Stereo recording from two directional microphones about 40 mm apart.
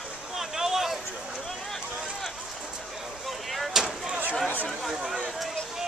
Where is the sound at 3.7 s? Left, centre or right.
Centre.